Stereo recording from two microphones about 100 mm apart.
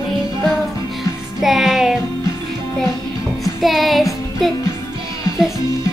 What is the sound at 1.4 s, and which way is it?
Music, 5° right (ahead or behind).